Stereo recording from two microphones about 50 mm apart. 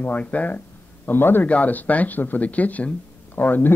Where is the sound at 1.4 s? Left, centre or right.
Left.